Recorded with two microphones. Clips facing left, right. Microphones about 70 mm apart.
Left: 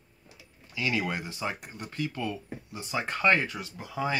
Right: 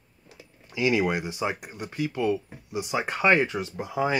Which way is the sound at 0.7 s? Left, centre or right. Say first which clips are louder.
Right 6 dB; centre.